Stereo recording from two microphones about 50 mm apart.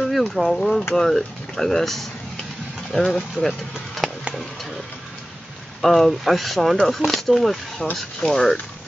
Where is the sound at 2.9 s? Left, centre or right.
Centre.